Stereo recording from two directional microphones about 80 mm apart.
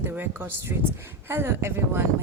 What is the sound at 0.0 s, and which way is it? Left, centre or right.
A woman's voice, right.